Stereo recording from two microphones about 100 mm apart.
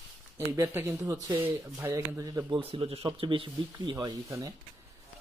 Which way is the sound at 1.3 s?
20° right (ahead or behind).